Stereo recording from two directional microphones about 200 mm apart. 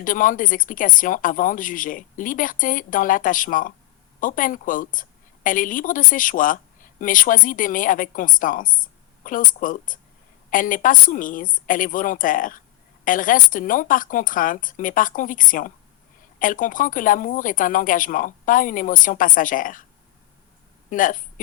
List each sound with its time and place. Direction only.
0.0 s speech: 40° left (ahead or behind)
20.9 s speech: 40° left (ahead or behind)